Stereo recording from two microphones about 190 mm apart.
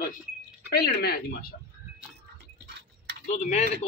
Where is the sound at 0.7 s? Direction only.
55° left (ahead or behind).